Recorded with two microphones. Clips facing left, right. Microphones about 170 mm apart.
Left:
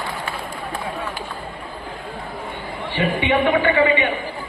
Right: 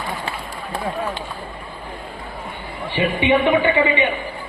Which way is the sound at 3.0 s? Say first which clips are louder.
Right 2 dB; 20° right (ahead or behind).